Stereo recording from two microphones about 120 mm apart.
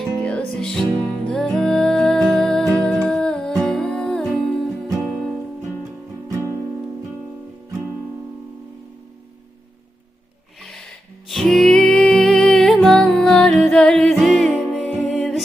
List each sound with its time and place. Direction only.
0.2 s music: 10° left (ahead or behind)
6.2 s music: 25° right (ahead or behind)
10.6 s music: 5° left (ahead or behind)